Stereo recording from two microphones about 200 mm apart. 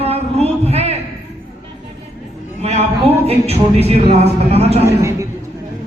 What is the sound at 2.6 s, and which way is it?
Speech, 30° right (ahead or behind).